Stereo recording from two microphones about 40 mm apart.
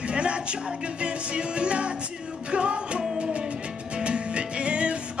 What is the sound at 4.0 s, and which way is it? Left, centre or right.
Music, right.